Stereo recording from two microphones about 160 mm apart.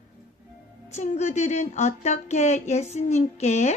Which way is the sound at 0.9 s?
45° left (ahead or behind).